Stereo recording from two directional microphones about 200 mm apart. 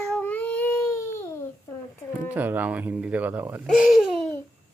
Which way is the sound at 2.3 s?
10° right (ahead or behind).